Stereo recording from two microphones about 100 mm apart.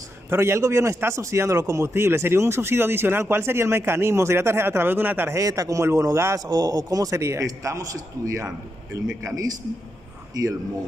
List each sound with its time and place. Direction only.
0.3 s a man's voice: 25° right (ahead or behind)
5.4 s a man's voice: 35° right (ahead or behind)
6.4 s a man's voice: 40° right (ahead or behind)